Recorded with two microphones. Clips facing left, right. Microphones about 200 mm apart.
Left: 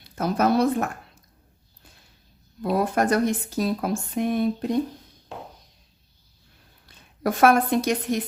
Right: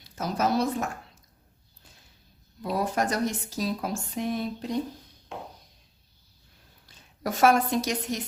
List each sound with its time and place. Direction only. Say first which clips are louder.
0.0 s a woman's voice: left 5 dB; 60° left (ahead or behind)
2.6 s speech: left 5 dB; 60° left (ahead or behind)
6.8 s a woman's voice: left 6 dB; 55° left (ahead or behind)